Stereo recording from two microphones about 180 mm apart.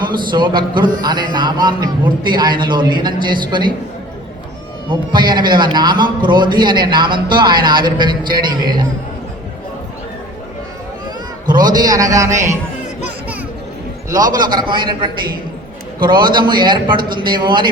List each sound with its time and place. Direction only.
0.0 s a man's voice: 25° right (ahead or behind)
4.9 s a man's voice: 25° right (ahead or behind)
11.4 s a man's voice: 25° right (ahead or behind)
14.3 s a man's voice: 25° right (ahead or behind)